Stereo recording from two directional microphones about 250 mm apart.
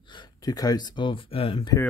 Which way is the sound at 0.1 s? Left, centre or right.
Centre.